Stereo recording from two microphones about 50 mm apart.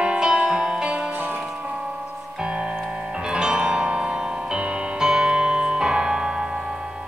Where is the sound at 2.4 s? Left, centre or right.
Centre.